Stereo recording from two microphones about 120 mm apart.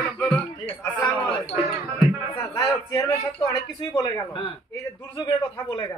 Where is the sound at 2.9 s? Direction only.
30° left (ahead or behind).